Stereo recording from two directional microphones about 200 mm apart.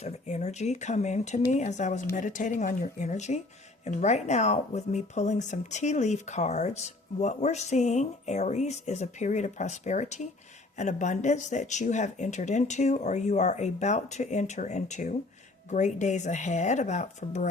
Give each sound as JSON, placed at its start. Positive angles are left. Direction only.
{"t": 0.0, "sound": "speech", "side_deg": 35}